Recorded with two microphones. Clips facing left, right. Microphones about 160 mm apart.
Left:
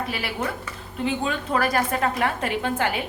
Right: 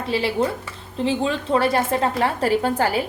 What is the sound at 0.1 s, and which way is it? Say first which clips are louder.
A woman's voice: right 7 dB; 25° right (ahead or behind).